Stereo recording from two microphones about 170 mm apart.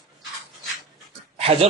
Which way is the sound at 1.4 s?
35° right (ahead or behind).